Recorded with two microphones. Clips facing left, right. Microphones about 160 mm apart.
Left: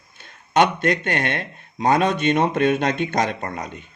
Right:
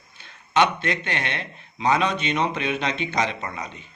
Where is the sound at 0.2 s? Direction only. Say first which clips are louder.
Left 3 dB; 50° left (ahead or behind).